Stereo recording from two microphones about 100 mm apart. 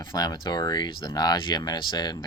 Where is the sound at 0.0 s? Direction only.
45° left (ahead or behind).